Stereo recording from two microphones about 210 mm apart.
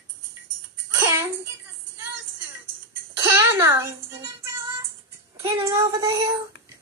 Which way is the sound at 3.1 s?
15° right (ahead or behind).